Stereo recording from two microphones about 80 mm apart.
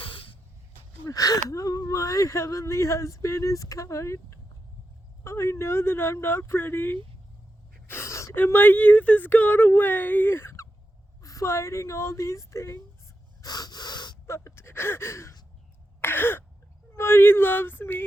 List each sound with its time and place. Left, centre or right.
0.0 s a sound: left
1.0 s speech: left
7.9 s gasp: left
8.4 s speech: left
11.2 s speech: left
13.4 s gasp: left
14.3 s gasp: left
16.0 s throat clearing: left
17.0 s speech: left